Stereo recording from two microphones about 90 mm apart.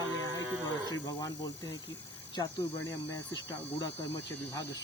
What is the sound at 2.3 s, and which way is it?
Speech, 60° left (ahead or behind).